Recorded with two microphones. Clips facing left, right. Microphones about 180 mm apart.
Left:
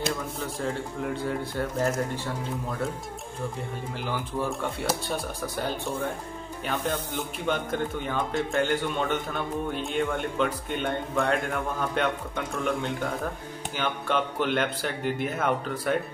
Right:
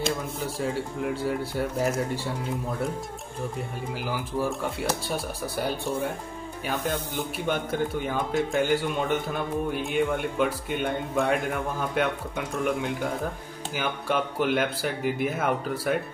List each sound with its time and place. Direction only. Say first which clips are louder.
0.6 s a man's voice: right 2 dB; 5° right (ahead or behind)
4.0 s a man's voice: right 1 dB; 5° right (ahead or behind)
7.4 s a man's voice: even; 10° right (ahead or behind)